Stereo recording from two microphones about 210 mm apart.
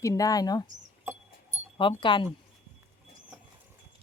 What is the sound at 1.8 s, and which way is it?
Speech, 25° left (ahead or behind).